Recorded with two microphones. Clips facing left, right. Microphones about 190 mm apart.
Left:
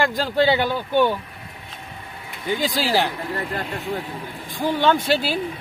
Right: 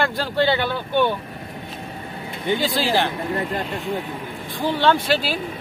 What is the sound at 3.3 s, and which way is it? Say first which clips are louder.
Speech: right 2 dB; 20° right (ahead or behind).